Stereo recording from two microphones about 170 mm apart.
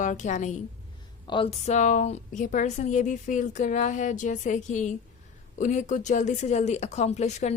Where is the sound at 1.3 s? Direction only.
35° left (ahead or behind).